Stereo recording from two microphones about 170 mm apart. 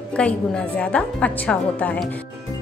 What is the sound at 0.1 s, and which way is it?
Speech, 5° left (ahead or behind).